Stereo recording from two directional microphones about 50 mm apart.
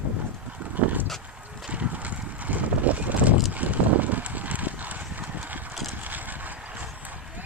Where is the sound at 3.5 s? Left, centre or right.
Right.